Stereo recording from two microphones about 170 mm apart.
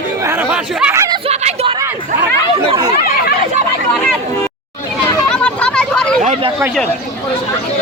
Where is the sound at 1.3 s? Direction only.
40° right (ahead or behind).